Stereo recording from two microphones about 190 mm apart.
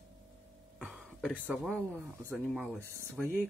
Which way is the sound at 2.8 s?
15° right (ahead or behind).